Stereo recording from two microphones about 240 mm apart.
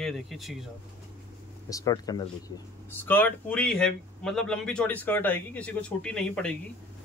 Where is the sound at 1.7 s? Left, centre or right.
Centre.